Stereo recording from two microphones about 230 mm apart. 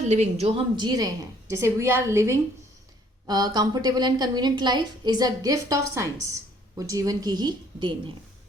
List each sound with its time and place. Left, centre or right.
0.1 s a woman's voice: right